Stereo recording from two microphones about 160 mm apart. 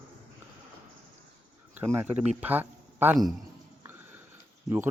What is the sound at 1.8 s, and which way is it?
Speech, 10° right (ahead or behind).